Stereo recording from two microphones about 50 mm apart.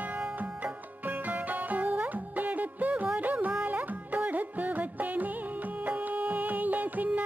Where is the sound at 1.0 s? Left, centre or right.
Right.